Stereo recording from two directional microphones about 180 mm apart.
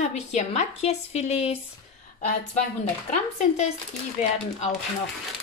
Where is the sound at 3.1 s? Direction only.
40° left (ahead or behind).